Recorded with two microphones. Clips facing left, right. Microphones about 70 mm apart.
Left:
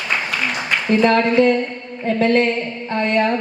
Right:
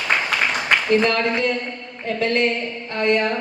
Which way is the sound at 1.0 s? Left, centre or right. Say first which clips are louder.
Left 6 dB; left.